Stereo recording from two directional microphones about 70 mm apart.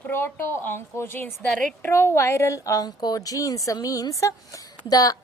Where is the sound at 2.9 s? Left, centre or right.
Left.